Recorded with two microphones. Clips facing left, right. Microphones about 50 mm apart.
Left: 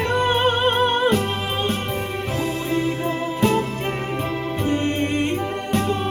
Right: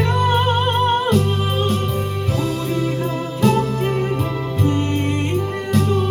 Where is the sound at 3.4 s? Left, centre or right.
Left.